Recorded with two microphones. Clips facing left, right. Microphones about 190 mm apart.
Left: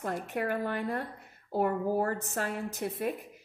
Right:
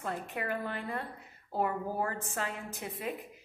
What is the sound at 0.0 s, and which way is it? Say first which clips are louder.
A woman's voice: left 4 dB; 45° left (ahead or behind).